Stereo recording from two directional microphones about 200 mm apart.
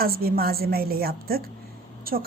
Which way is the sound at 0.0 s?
50° right (ahead or behind).